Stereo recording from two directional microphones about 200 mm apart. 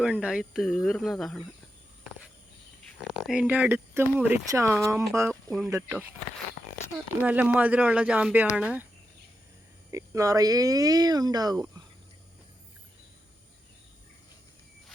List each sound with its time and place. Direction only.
0.0 s speech: 5° right (ahead or behind)
3.0 s speech: centre (ahead or behind)
5.3 s speech: 5° left (ahead or behind)
5.7 s speech: 10° right (ahead or behind)
7.2 s speech: 10° right (ahead or behind)
9.9 s speech: 15° right (ahead or behind)